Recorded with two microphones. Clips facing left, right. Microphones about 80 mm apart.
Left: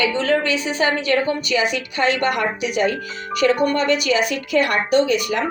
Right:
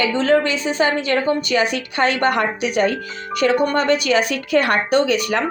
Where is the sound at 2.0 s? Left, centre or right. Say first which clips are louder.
Right 1 dB; right.